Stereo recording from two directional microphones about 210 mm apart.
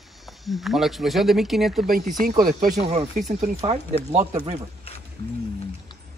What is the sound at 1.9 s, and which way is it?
Speech, 40° right (ahead or behind).